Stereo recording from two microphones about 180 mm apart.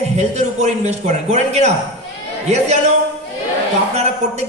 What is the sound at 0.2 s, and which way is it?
Speech, 40° right (ahead or behind).